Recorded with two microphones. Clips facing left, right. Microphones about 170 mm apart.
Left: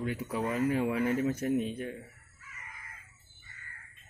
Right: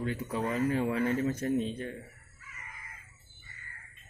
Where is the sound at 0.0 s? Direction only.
10° left (ahead or behind).